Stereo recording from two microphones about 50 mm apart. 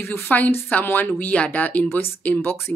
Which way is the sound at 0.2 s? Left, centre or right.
Left.